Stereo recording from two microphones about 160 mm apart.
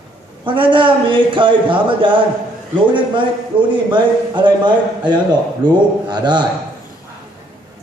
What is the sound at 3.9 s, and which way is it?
A man's voice, 30° right (ahead or behind).